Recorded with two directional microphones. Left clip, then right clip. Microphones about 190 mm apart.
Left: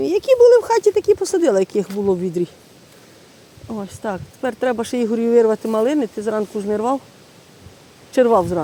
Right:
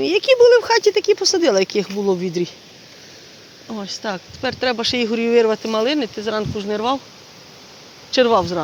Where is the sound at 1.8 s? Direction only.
5° left (ahead or behind).